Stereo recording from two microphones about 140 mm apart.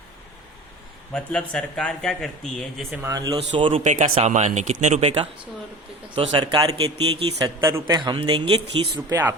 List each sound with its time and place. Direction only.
1.1 s speech: 5° left (ahead or behind)
3.0 s speech: 25° right (ahead or behind)
3.3 s speech: 40° right (ahead or behind)
3.8 s speech: 60° right (ahead or behind); by 8.9 s 40° right (ahead or behind)
9.0 s speech: 15° right (ahead or behind)